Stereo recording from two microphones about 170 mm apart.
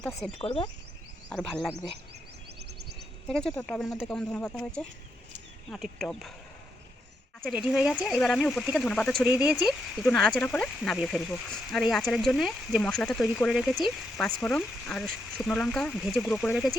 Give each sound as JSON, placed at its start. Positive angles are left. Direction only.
{"t": 0.0, "sound": "speech", "side_deg": 0}
{"t": 0.3, "sound": "speech", "side_deg": 30}
{"t": 1.3, "sound": "speech", "side_deg": 5}
{"t": 3.2, "sound": "speech", "side_deg": 5}
{"t": 7.7, "sound": "speech", "side_deg": 0}
{"t": 9.2, "sound": "speech", "side_deg": -10}